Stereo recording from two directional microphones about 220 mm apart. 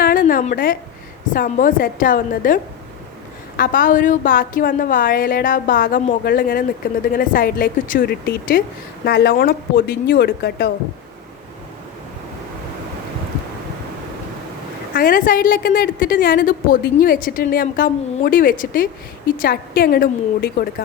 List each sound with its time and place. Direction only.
0.0 s a sound: 40° left (ahead or behind)
1.3 s a woman's voice: 40° left (ahead or behind)
3.6 s a woman's voice: 40° left (ahead or behind)
14.9 s a woman's voice: 40° left (ahead or behind)